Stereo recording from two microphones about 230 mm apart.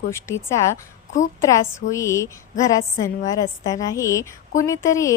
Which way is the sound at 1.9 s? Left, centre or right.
Centre.